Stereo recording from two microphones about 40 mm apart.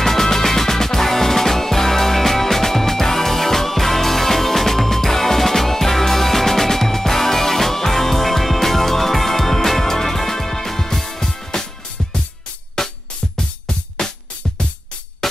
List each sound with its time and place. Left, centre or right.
0.0 s music: centre
12.8 s music: centre